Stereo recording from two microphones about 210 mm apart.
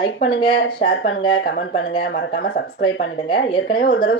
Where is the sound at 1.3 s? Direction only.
60° left (ahead or behind).